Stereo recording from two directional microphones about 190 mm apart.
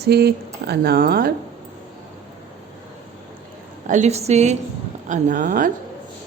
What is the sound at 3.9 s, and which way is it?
Speech, 35° right (ahead or behind).